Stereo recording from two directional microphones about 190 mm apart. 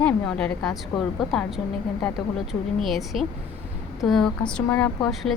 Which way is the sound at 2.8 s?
Centre (ahead or behind).